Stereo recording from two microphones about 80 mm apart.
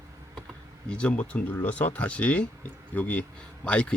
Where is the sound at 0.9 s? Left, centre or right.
Centre.